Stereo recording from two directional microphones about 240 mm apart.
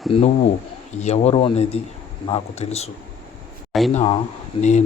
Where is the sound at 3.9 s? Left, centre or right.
Left.